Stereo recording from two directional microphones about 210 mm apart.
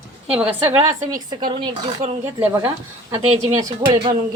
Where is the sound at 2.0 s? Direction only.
30° right (ahead or behind).